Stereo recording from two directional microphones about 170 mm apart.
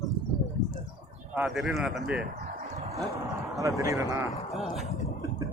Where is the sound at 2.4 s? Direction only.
40° right (ahead or behind).